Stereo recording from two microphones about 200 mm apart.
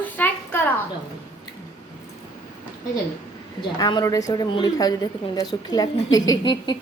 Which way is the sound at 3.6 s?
20° left (ahead or behind).